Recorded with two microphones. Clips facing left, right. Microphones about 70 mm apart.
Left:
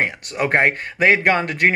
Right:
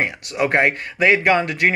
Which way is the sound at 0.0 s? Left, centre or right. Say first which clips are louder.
Right 1 dB; left.